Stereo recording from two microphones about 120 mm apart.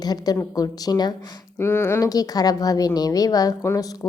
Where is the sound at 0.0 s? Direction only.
35° left (ahead or behind).